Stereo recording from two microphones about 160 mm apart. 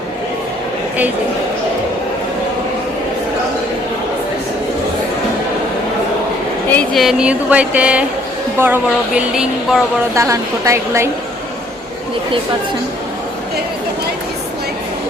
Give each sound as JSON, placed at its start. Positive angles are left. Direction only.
{"t": 6.7, "sound": "speech", "side_deg": 5}
{"t": 10.2, "sound": "a woman's voice", "side_deg": -20}